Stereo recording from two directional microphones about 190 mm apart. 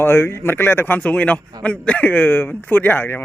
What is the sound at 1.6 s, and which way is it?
Speech, 5° left (ahead or behind).